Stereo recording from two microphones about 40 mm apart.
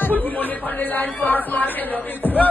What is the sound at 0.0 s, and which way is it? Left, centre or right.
Speech, left.